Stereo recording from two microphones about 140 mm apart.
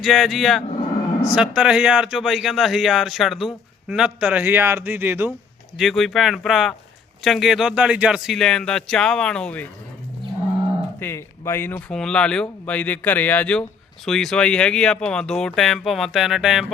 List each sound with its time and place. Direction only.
0.0 s a man's voice: centre (ahead or behind); by 5.3 s 15° right (ahead or behind)
5.7 s speech: centre (ahead or behind)
11.0 s speech: 15° left (ahead or behind)
11.9 s speech: 5° left (ahead or behind)